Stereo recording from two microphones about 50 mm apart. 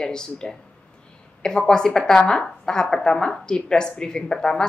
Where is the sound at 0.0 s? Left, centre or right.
Centre.